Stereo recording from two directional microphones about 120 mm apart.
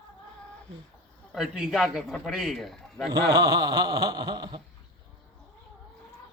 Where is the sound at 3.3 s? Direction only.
30° right (ahead or behind).